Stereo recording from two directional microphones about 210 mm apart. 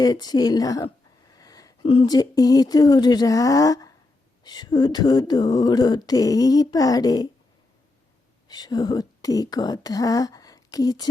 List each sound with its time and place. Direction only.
0.0 s speech: 20° left (ahead or behind)
4.4 s a sound: 20° left (ahead or behind)
8.4 s speech: 20° left (ahead or behind)